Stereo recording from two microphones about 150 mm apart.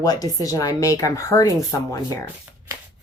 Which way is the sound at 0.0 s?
25° left (ahead or behind).